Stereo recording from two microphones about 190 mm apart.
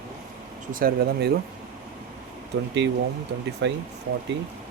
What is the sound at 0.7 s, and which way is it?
Speech, 50° right (ahead or behind).